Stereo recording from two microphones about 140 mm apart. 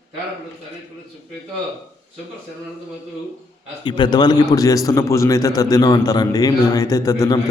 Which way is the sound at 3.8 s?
35° left (ahead or behind).